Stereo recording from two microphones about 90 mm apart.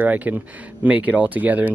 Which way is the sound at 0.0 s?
20° right (ahead or behind).